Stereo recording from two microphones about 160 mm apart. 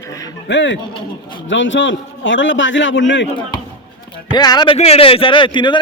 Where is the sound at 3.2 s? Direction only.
30° left (ahead or behind).